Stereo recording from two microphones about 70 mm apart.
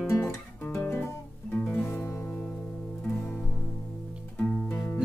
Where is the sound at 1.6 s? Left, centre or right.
Left.